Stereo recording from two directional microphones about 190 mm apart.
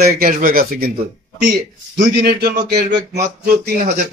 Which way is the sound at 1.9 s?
55° right (ahead or behind).